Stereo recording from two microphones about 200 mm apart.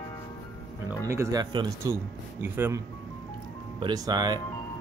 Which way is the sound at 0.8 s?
15° right (ahead or behind).